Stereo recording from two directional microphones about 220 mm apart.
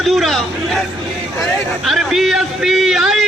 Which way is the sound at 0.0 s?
Centre (ahead or behind).